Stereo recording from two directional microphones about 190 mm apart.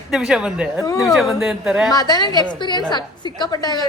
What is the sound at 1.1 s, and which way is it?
Speech, centre (ahead or behind).